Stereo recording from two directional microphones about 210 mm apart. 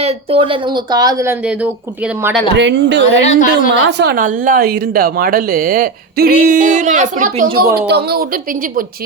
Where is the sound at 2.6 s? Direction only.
60° right (ahead or behind).